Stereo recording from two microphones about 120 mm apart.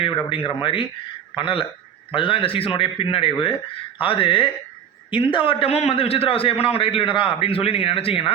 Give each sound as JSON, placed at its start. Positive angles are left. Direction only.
{"t": 0.0, "sound": "a man's voice", "side_deg": 45}